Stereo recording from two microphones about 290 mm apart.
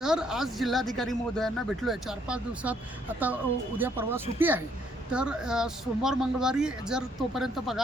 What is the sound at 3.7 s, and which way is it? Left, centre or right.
Speech, centre.